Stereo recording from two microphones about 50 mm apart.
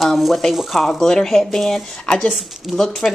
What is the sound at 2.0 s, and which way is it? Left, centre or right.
Speech, centre.